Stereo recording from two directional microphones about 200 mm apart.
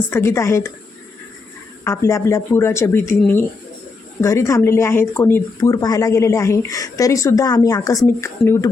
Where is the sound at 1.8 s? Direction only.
15° left (ahead or behind).